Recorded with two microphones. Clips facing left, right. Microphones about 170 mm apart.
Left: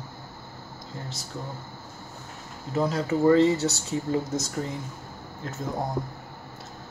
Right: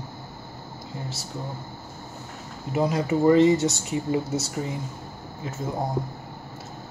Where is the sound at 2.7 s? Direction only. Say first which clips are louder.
Right 2 dB; 15° right (ahead or behind).